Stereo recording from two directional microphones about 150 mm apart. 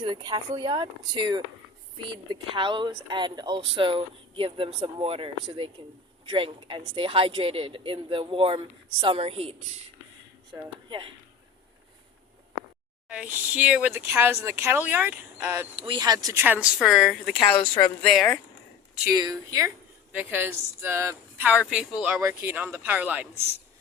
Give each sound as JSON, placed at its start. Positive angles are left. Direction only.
{"t": 0.0, "sound": "speech", "side_deg": -30}
{"t": 10.8, "sound": "speech", "side_deg": -35}
{"t": 13.1, "sound": "speech", "side_deg": -10}
{"t": 15.7, "sound": "speech", "side_deg": -35}
{"t": 19.1, "sound": "speech", "side_deg": -25}